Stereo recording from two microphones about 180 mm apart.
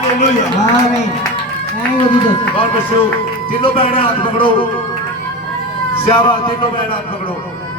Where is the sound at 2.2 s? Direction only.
30° left (ahead or behind).